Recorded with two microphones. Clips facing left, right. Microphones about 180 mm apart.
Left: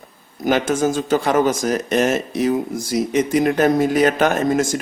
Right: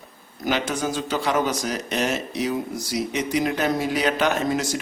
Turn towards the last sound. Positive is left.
turn(degrees=50)  # may be behind; listen again after turning